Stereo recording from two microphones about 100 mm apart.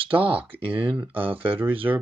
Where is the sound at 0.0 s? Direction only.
65° right (ahead or behind).